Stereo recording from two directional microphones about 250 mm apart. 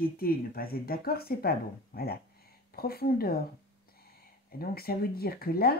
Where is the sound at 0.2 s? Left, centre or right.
Left.